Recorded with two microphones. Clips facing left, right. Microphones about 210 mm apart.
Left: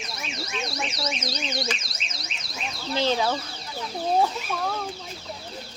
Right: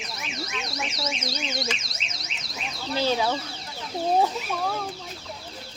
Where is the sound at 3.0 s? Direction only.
5° right (ahead or behind).